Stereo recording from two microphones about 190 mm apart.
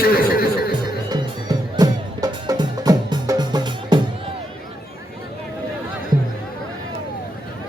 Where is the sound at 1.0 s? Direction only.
20° right (ahead or behind).